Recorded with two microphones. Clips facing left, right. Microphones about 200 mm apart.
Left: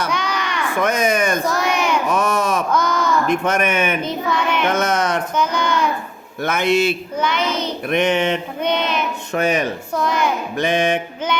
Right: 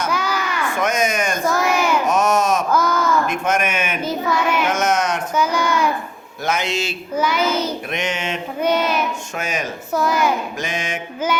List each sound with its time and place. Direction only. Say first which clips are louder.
0.1 s a sound: even; 5° right (ahead or behind)
0.8 s speech: left 3 dB; 60° left (ahead or behind)
1.5 s a sound: right 1 dB; 5° right (ahead or behind)
2.0 s a sound: right 2 dB; 60° left (ahead or behind)
2.7 s a sound: even; 5° right (ahead or behind)
3.4 s a man's voice: left 2 dB; 60° left (ahead or behind)
4.0 s child singing: right 1 dB; 5° right (ahead or behind)
6.4 s a man's voice: left 5 dB; 60° left (ahead or behind)
7.2 s child singing: right 4 dB; 5° right (ahead or behind)
7.9 s a man's voice: left 7 dB; 55° left (ahead or behind)
8.6 s child singing: right 3 dB; 5° right (ahead or behind)
9.3 s a man's voice: left 7 dB; 60° left (ahead or behind)
9.9 s a woman's voice: right 3 dB; 5° right (ahead or behind)
10.6 s a man's voice: left 8 dB; 60° left (ahead or behind)